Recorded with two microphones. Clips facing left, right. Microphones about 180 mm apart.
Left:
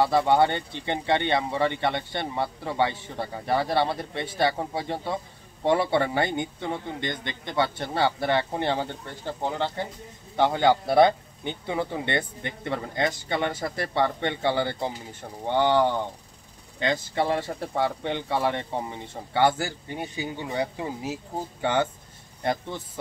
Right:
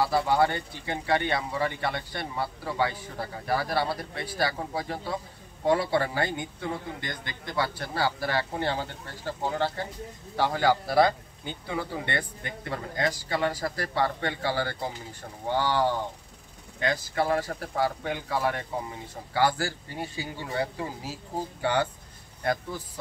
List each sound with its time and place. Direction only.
0.0 s speech: 25° left (ahead or behind)